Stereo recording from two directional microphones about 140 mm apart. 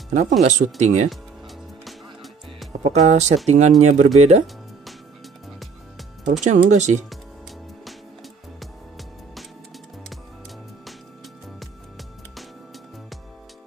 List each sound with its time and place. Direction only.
0.4 s speech: 60° right (ahead or behind)
1.9 s music: centre (ahead or behind)
2.8 s speech: 55° right (ahead or behind)
6.2 s speech: 60° right (ahead or behind)
8.5 s music: centre (ahead or behind)